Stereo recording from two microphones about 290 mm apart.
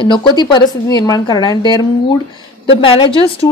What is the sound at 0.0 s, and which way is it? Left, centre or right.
A woman's voice, centre.